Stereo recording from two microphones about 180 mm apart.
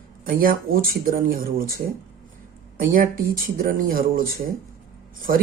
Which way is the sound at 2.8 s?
50° right (ahead or behind).